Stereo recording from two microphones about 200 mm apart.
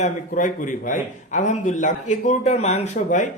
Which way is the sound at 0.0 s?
40° left (ahead or behind).